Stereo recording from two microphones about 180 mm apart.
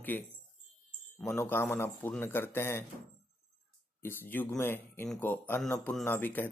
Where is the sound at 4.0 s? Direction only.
10° left (ahead or behind).